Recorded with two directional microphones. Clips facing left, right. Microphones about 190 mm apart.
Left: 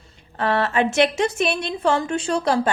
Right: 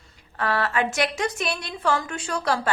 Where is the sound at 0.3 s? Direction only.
25° left (ahead or behind).